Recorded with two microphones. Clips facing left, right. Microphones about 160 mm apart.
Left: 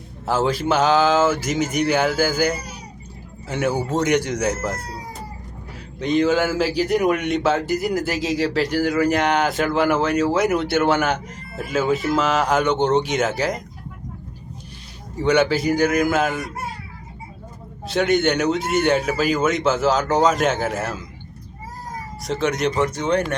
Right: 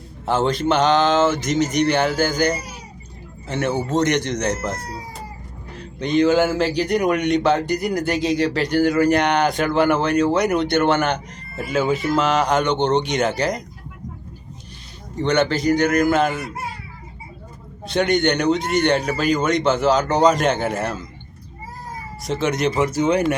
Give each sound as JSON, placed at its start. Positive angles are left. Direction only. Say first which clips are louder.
{"t": 0.3, "sound": "a man's voice", "louder": "right 1 dB", "side_deg": 5}
{"t": 15.1, "sound": "speech", "louder": "left 1 dB", "side_deg": 5}
{"t": 17.8, "sound": "a man's voice", "louder": "even", "side_deg": 0}
{"t": 22.2, "sound": "a man's voice", "louder": "right 1 dB", "side_deg": 0}